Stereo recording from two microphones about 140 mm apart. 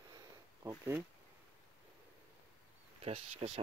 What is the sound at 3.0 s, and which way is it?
Speech, 45° right (ahead or behind).